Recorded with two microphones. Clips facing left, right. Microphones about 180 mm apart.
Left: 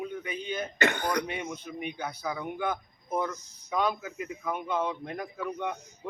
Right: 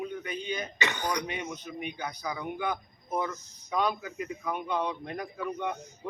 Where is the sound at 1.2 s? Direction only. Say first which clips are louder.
Left 1 dB; 10° left (ahead or behind).